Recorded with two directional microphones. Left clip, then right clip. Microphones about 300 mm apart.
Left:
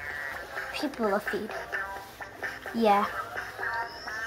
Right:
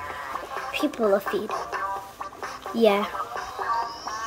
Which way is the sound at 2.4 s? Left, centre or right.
Centre.